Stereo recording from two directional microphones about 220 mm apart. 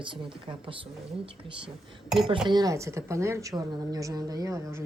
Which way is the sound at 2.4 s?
20° right (ahead or behind).